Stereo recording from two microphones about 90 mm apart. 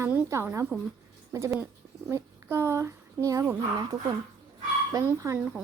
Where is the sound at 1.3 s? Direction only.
30° right (ahead or behind).